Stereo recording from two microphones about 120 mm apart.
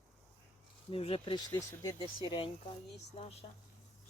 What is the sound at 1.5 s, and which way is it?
Speech, 30° left (ahead or behind).